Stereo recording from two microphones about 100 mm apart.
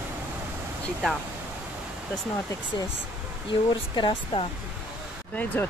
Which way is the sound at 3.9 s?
55° left (ahead or behind).